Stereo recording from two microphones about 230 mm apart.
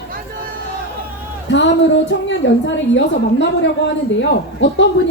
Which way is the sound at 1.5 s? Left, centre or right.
Left.